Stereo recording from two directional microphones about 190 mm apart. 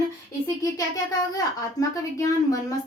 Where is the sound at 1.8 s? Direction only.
20° left (ahead or behind).